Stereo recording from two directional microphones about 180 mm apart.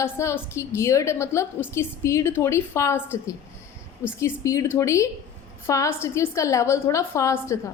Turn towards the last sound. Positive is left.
turn(degrees=15)  # may be behind; listen again after turning